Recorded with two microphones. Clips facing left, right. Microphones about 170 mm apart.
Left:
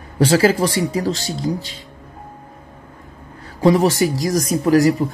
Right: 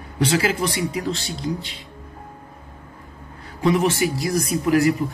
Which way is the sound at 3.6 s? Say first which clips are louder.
Left 5 dB; 40° left (ahead or behind).